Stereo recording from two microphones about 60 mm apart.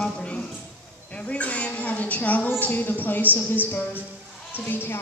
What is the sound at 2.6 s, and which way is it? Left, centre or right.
A woman's voice, left.